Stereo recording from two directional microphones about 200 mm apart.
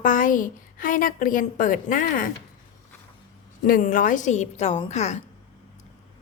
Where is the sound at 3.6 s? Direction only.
45° left (ahead or behind).